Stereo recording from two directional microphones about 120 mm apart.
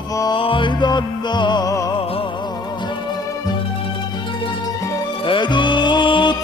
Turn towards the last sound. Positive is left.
turn(degrees=40)  # may be behind; listen again after turning